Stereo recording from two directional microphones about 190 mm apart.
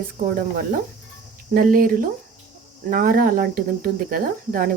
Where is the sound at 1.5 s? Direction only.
50° right (ahead or behind).